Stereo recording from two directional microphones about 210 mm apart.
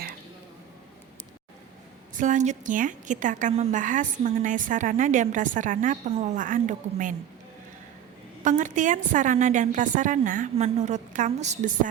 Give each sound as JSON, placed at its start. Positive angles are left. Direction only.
{"t": 2.1, "sound": "a woman's voice", "side_deg": -35}
{"t": 8.4, "sound": "a woman's voice", "side_deg": -35}